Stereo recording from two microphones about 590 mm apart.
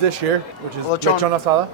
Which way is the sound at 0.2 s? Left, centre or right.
Right.